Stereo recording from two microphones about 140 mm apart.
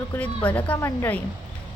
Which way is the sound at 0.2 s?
10° left (ahead or behind).